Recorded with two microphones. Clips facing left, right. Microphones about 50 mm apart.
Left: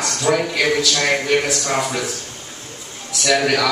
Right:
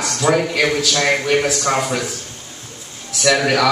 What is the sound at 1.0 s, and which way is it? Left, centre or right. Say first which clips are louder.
Speech: right 4 dB; centre.